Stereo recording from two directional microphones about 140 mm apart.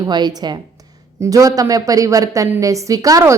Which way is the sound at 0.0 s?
30° right (ahead or behind).